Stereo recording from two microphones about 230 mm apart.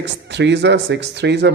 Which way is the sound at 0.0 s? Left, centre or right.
Right.